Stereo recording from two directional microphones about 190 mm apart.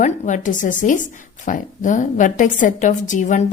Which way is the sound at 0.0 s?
40° left (ahead or behind).